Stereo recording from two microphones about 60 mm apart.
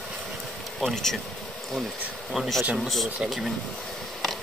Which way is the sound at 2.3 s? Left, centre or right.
Centre.